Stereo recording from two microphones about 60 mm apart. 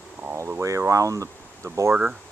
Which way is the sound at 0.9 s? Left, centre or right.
Right.